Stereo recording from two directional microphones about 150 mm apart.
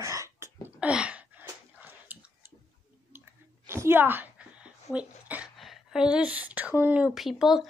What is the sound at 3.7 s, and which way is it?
Speech, 15° right (ahead or behind).